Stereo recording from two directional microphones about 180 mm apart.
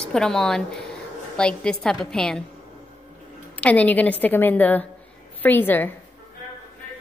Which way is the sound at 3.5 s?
10° left (ahead or behind).